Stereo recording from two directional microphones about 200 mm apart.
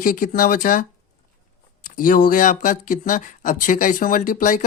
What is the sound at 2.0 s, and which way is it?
Speech, 45° left (ahead or behind).